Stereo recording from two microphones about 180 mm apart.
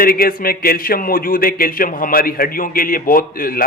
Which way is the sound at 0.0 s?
55° left (ahead or behind).